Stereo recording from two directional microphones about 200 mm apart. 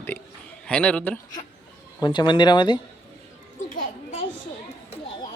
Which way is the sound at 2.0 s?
20° left (ahead or behind).